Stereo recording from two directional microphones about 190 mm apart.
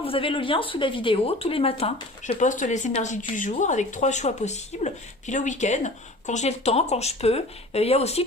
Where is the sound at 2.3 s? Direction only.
40° left (ahead or behind).